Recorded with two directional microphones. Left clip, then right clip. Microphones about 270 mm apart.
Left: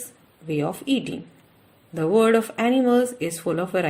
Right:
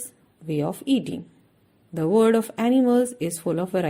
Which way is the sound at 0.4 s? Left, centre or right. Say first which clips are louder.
Left 1 dB; right.